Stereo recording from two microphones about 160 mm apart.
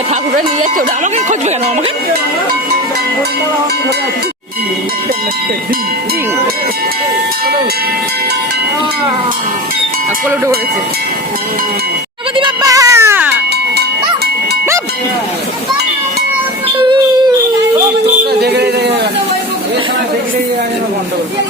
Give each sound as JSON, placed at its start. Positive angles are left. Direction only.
{"t": 0.1, "sound": "speech", "side_deg": -55}
{"t": 12.4, "sound": "speech", "side_deg": -20}
{"t": 18.3, "sound": "music", "side_deg": -90}